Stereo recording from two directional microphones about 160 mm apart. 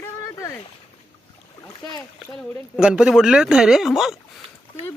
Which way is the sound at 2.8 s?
5° right (ahead or behind).